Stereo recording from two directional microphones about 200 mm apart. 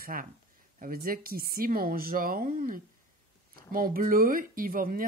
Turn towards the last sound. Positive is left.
turn(degrees=-45)  # may be behind; listen again after turning